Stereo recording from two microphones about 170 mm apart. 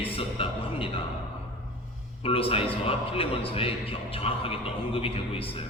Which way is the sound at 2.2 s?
35° left (ahead or behind).